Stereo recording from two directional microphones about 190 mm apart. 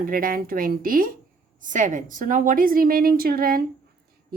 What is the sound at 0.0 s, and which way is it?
Speech, 50° right (ahead or behind).